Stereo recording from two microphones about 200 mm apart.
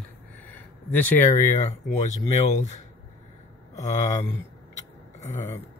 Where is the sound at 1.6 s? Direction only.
35° left (ahead or behind).